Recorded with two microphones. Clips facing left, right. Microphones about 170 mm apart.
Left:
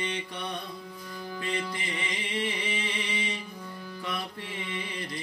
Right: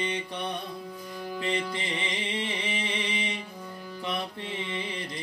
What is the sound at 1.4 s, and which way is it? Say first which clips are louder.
Music: right 3 dB; 20° right (ahead or behind).